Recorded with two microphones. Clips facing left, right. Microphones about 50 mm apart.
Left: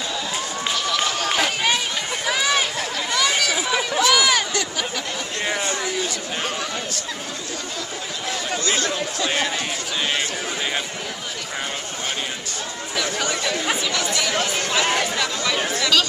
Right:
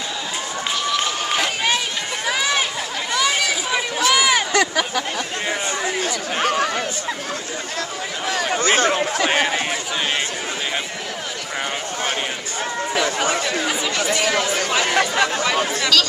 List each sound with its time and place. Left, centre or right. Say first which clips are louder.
0.7 s run: right 1 dB; centre
3.1 s chatter: right 2 dB; centre
4.1 s a sound: right 3 dB; centre
4.5 s a sound: right 6 dB; right
5.9 s speech: right 4 dB; right
8.5 s speech: right 6 dB; right
14.3 s speech: right 3 dB; right
15.0 s speech: right 5 dB; right
15.9 s chatter: right 1 dB; centre